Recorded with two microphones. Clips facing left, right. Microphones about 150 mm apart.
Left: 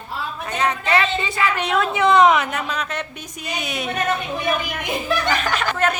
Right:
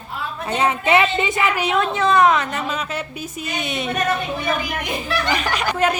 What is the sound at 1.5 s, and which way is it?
Speech, centre (ahead or behind).